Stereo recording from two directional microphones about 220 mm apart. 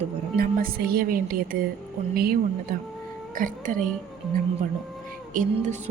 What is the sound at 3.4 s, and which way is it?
Speech, 35° right (ahead or behind).